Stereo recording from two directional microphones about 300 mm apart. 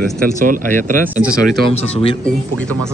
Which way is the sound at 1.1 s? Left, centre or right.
Centre.